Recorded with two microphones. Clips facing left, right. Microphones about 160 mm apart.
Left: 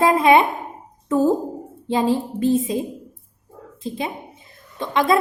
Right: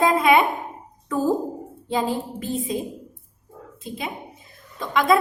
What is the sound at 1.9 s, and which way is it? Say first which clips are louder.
Speech: left 5 dB; 25° left (ahead or behind).